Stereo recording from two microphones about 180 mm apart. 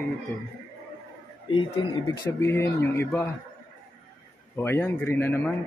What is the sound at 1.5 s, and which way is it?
Speech, 30° left (ahead or behind).